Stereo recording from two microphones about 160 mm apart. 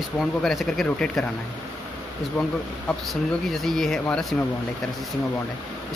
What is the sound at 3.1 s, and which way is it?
Speech, centre (ahead or behind).